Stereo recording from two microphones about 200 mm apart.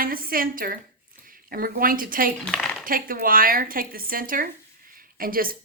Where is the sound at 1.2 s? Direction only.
45° right (ahead or behind).